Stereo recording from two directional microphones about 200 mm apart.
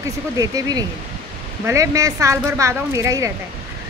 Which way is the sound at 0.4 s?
20° right (ahead or behind).